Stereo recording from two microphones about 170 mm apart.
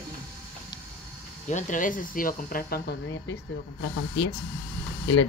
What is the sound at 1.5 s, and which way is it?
Speech, 50° left (ahead or behind).